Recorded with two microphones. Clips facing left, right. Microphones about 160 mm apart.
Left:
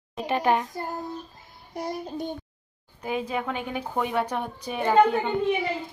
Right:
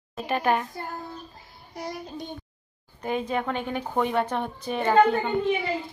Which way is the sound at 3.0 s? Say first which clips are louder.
Right 1 dB; 5° left (ahead or behind).